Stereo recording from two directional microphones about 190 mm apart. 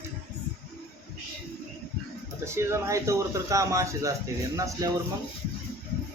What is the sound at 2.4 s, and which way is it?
A man's voice, 15° right (ahead or behind).